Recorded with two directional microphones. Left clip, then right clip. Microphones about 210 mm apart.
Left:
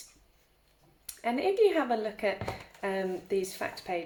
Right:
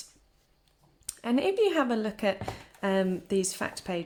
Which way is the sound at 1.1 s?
45° right (ahead or behind).